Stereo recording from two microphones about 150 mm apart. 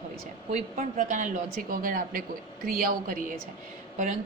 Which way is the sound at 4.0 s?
55° right (ahead or behind).